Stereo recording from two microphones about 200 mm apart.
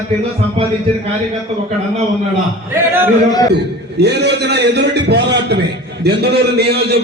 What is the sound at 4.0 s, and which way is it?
A man's voice, 55° right (ahead or behind).